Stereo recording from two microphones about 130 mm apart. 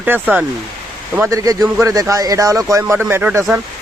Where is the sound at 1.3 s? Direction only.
25° right (ahead or behind).